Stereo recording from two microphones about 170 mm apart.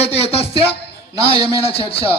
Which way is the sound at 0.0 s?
35° left (ahead or behind).